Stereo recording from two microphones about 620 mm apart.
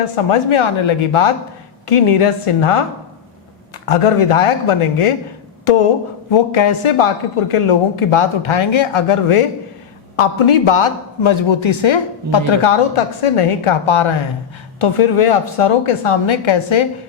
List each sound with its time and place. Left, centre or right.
0.3 s speech: left
3.8 s speech: left
6.3 s speech: left